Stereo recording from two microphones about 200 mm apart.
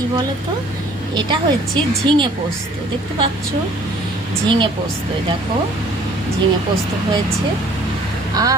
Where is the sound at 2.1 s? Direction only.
25° right (ahead or behind).